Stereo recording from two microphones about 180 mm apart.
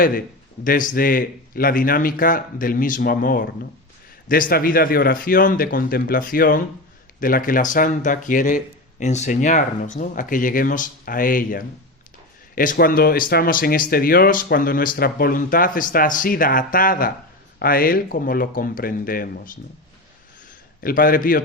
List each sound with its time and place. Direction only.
0.0 s speech: 50° left (ahead or behind)
20.8 s speech: 50° left (ahead or behind)